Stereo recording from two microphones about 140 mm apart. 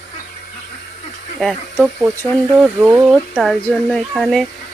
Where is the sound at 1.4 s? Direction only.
Centre (ahead or behind).